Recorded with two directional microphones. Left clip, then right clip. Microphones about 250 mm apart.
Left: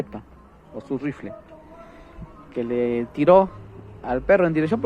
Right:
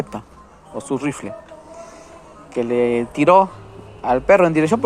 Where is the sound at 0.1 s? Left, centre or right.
Centre.